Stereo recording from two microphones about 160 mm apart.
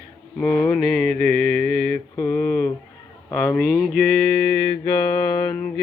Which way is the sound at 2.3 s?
5° left (ahead or behind).